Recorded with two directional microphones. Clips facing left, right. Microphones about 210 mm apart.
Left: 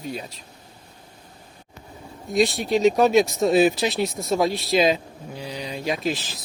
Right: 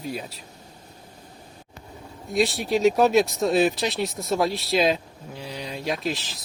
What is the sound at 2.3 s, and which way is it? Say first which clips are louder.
Speech: left 2 dB; 5° right (ahead or behind).